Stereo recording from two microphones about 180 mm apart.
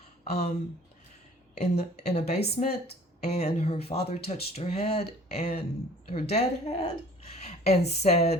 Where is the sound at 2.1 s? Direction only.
35° left (ahead or behind).